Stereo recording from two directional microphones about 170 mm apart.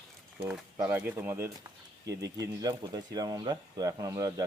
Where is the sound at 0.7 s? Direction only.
15° right (ahead or behind).